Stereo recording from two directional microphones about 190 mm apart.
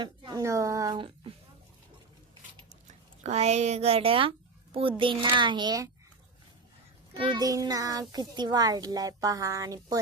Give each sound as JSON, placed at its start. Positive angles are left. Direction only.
{"t": 0.0, "sound": "a child's voice", "side_deg": -20}
{"t": 3.2, "sound": "a child's voice", "side_deg": -35}
{"t": 7.1, "sound": "a child's voice", "side_deg": -25}